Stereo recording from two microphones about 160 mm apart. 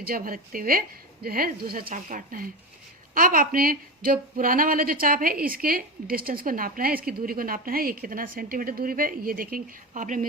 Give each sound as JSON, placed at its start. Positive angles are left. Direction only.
{"t": 0.0, "sound": "a woman's voice", "side_deg": -65}
{"t": 1.9, "sound": "a woman's voice", "side_deg": -55}